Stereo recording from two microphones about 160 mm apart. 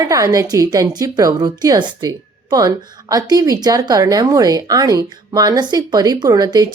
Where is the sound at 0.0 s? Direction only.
20° right (ahead or behind).